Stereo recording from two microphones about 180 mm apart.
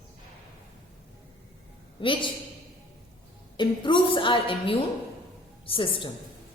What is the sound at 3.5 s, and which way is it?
A woman's voice, 25° left (ahead or behind).